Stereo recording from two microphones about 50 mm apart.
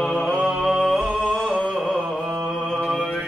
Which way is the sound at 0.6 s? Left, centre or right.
Centre.